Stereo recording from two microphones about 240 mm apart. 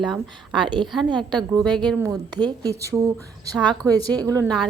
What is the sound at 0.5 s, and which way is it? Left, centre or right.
Speech, centre.